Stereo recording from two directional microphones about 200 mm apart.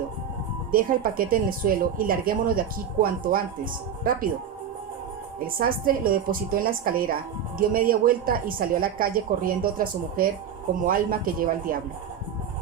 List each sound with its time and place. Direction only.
0.7 s speech: 45° right (ahead or behind)
5.5 s speech: 45° right (ahead or behind)